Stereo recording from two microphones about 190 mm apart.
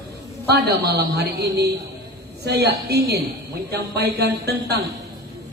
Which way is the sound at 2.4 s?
60° right (ahead or behind).